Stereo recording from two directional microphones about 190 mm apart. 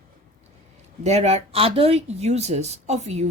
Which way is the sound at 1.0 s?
35° right (ahead or behind).